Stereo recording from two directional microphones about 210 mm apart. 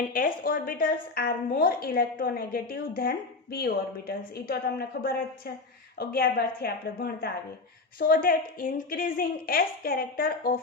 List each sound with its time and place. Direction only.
0.1 s a woman's voice: 40° left (ahead or behind)